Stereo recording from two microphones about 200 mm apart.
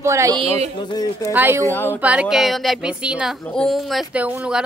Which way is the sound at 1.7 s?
10° left (ahead or behind).